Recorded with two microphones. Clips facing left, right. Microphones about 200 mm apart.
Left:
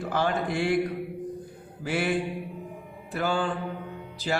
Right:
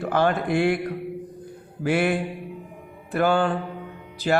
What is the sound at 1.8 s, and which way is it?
A man's voice, 60° right (ahead or behind).